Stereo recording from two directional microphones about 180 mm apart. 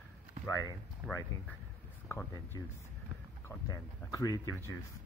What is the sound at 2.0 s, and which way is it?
Speech, 15° left (ahead or behind).